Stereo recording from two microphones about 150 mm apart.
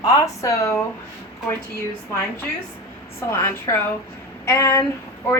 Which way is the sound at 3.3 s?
15° left (ahead or behind).